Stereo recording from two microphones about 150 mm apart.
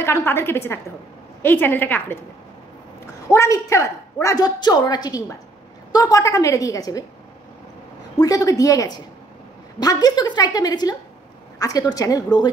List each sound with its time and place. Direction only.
0.0 s a woman's voice: 15° left (ahead or behind)
3.3 s a woman's voice: 20° left (ahead or behind)
8.2 s a woman's voice: 20° left (ahead or behind)
11.5 s a sound: 25° left (ahead or behind)
11.9 s a woman's voice: 25° left (ahead or behind)